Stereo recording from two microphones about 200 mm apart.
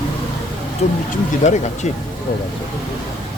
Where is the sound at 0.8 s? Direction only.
35° left (ahead or behind).